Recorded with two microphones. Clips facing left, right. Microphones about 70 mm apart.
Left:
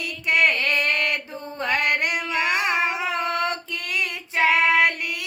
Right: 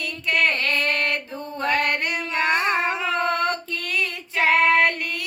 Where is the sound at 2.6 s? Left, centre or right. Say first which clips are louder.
Right 1 dB; centre.